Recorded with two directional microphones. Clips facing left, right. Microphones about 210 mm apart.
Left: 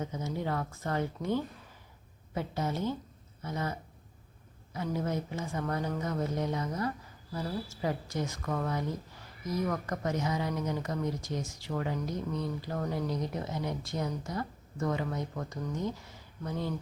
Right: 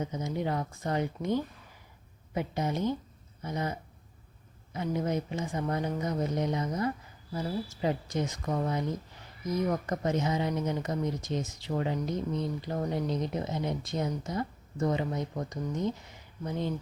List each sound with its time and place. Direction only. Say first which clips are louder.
0.0 s speech: right 2 dB; 20° right (ahead or behind)